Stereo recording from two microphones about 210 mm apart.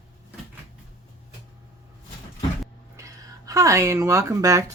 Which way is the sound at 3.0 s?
15° right (ahead or behind).